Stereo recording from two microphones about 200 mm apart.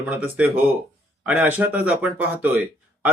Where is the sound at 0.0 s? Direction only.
5° right (ahead or behind).